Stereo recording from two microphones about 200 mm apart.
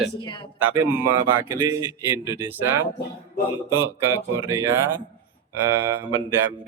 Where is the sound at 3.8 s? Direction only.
10° right (ahead or behind).